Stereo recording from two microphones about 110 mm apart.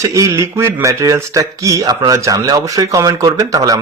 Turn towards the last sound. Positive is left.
turn(degrees=-35)  # may be behind; listen again after turning